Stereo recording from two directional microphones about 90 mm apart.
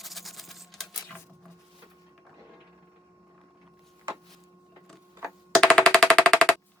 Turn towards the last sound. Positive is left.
turn(degrees=5)  # may be behind; listen again after turning